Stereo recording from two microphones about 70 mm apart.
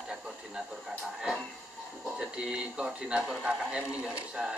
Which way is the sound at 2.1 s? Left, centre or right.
Centre.